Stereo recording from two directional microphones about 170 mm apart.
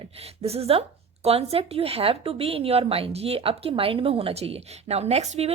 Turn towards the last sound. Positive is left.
turn(degrees=-40)  # may be behind; listen again after turning